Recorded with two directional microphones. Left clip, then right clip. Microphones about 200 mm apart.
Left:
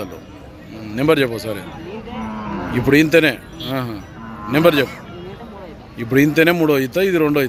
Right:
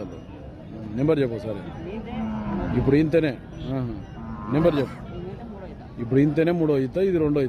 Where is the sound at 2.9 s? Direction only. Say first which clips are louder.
Left 8 dB; 10° left (ahead or behind).